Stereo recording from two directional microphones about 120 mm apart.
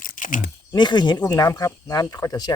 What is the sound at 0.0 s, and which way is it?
Crunch, 90° left.